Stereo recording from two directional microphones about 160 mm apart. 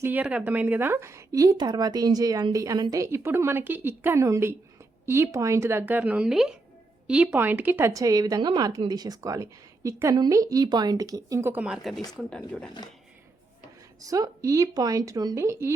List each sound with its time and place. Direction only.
0.0 s a woman's voice: 10° right (ahead or behind)
14.0 s a woman's voice: 20° right (ahead or behind)